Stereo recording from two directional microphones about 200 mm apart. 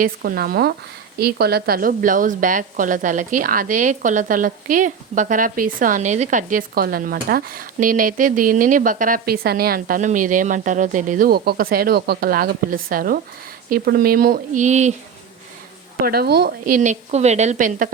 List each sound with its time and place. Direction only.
0.0 s a woman's voice: 45° right (ahead or behind)
16.0 s a woman's voice: 50° right (ahead or behind)
16.8 s speech: 35° right (ahead or behind)